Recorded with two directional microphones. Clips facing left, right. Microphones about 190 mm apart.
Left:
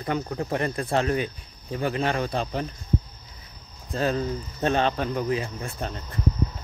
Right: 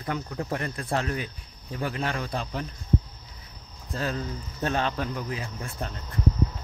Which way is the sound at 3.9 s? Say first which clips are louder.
Left 6 dB; 20° left (ahead or behind).